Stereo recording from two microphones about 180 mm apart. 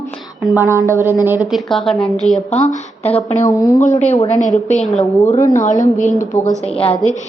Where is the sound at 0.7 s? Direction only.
15° right (ahead or behind).